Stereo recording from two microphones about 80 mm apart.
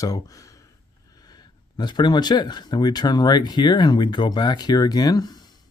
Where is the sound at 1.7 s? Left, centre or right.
Left.